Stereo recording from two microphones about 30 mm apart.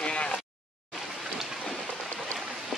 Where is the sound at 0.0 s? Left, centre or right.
Left.